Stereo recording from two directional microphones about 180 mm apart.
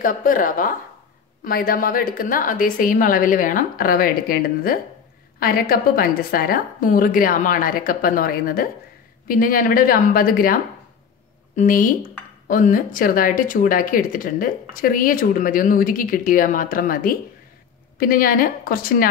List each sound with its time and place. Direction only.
0.0 s speech: 50° left (ahead or behind)